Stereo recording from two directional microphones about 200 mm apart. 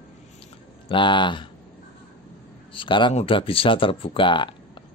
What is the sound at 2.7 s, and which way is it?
Speech, 25° left (ahead or behind).